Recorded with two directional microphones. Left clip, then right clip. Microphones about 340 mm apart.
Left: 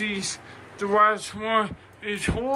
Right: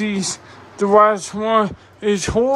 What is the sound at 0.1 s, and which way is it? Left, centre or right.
Speech, centre.